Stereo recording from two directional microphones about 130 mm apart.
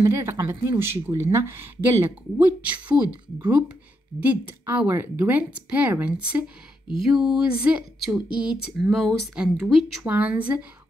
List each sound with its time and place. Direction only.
0.0 s speech: 20° right (ahead or behind); by 10.0 s centre (ahead or behind)
10.0 s speech: 10° right (ahead or behind)